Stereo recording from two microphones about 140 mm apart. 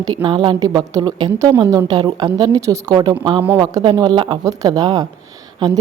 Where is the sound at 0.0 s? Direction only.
30° right (ahead or behind).